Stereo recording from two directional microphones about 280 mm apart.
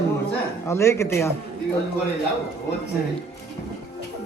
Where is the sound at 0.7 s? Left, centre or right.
Centre.